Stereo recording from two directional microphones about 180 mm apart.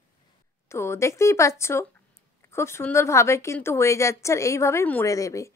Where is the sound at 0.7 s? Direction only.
15° left (ahead or behind).